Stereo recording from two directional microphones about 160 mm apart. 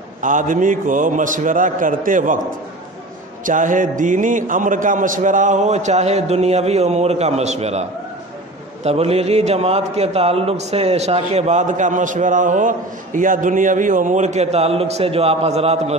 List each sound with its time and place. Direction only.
0.2 s a man's voice: 55° right (ahead or behind)
3.4 s a man's voice: 55° right (ahead or behind)
8.8 s a man's voice: 40° right (ahead or behind)